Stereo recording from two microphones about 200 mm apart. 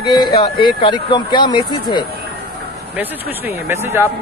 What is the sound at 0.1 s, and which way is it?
Speech, 25° left (ahead or behind).